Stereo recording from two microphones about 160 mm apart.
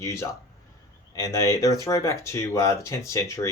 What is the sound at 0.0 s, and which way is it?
Speech, 20° left (ahead or behind).